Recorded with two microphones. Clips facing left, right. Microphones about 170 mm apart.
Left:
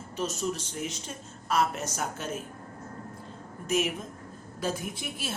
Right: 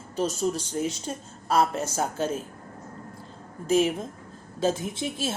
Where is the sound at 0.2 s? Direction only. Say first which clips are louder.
Right 5 dB; 35° right (ahead or behind).